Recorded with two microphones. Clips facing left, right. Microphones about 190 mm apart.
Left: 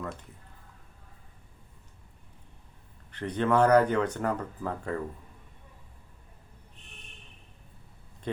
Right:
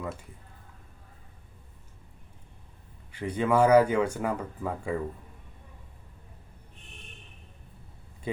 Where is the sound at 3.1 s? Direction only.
10° right (ahead or behind).